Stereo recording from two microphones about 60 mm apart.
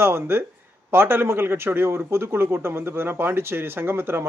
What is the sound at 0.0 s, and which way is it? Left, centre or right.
Speech, right.